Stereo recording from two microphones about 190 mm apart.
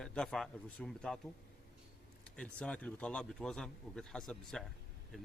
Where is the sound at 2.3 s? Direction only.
5° left (ahead or behind).